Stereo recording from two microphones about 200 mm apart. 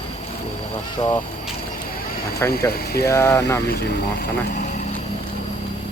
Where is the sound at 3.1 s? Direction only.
15° left (ahead or behind).